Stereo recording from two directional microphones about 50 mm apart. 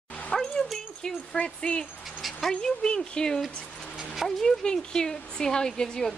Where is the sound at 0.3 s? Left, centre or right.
Centre.